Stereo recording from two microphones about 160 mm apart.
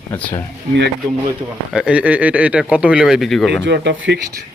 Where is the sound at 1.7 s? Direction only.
5° right (ahead or behind).